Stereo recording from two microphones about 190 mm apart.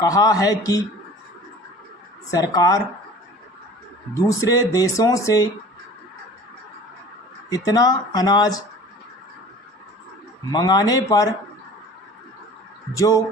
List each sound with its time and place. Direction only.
0.0 s speech: 20° left (ahead or behind)
2.3 s speech: 20° left (ahead or behind)
4.1 s speech: 15° left (ahead or behind)
7.5 s speech: 20° left (ahead or behind)
10.5 s speech: 20° left (ahead or behind)
13.0 s speech: 15° left (ahead or behind)